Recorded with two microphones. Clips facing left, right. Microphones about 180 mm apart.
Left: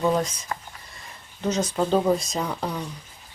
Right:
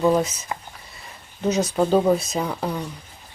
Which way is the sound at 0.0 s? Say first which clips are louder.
Right 4 dB; 5° right (ahead or behind).